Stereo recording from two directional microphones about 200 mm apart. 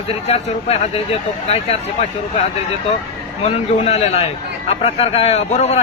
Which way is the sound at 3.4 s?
30° left (ahead or behind).